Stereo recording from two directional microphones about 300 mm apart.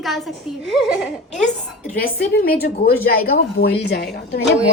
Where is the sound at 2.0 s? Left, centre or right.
Left.